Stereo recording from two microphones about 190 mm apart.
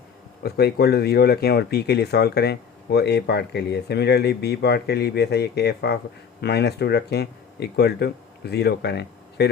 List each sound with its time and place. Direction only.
0.4 s speech: 55° left (ahead or behind)